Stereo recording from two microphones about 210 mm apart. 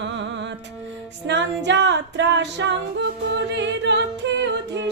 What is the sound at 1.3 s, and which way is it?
Music, 55° right (ahead or behind).